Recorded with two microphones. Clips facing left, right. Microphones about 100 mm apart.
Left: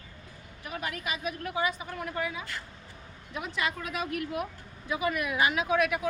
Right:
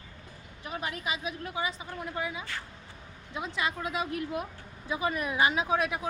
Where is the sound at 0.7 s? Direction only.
25° right (ahead or behind).